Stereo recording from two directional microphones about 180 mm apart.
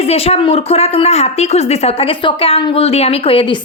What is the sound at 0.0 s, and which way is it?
Speech, 35° left (ahead or behind).